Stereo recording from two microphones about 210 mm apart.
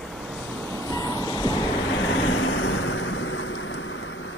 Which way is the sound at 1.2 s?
15° left (ahead or behind).